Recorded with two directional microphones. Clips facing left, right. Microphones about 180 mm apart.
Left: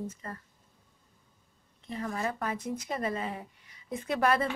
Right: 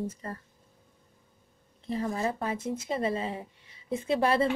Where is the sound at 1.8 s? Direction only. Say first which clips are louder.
Right 4 dB; 30° right (ahead or behind).